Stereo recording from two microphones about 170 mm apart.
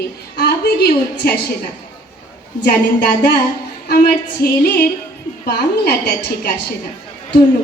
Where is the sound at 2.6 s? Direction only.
75° left (ahead or behind).